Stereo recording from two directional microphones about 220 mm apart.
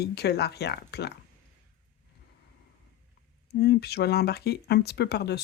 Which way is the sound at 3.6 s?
45° left (ahead or behind).